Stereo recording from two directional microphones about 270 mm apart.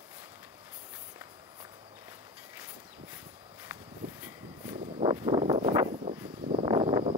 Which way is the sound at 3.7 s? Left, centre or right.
Centre.